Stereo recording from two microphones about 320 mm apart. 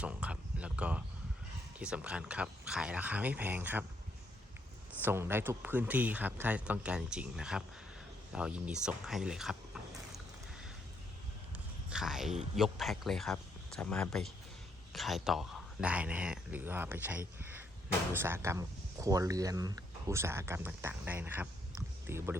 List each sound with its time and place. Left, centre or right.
0.0 s speech: centre
5.0 s speech: centre
11.5 s a sound: centre
12.5 s speech: centre